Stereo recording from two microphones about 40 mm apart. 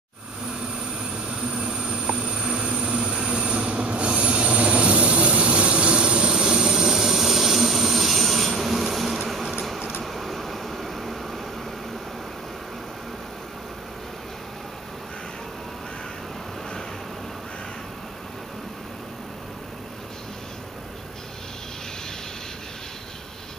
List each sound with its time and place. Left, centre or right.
1.5 s vehicle: right
2.2 s train: right
6.3 s vehicle: centre
10.0 s a sound: centre